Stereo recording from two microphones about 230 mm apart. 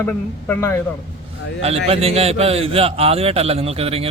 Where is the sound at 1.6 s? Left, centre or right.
Right.